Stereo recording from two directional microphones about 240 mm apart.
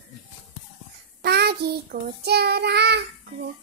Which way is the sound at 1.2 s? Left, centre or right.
Right.